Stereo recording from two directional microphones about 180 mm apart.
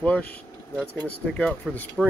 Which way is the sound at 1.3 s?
5° left (ahead or behind).